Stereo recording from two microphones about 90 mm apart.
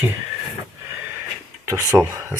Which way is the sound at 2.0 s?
20° right (ahead or behind).